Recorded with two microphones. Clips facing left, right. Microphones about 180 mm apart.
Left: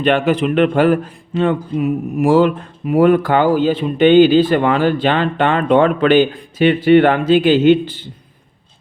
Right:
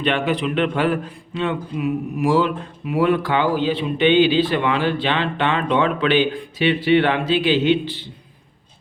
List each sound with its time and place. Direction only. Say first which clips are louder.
0.0 s speech: left 6 dB; 45° left (ahead or behind)